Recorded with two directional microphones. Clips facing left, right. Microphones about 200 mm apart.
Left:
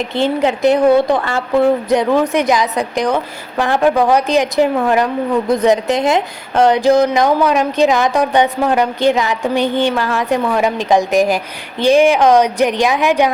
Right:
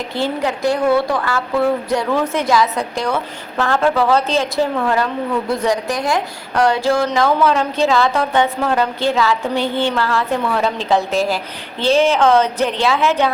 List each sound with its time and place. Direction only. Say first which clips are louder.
0.2 s a woman's voice: left 5 dB; 20° left (ahead or behind)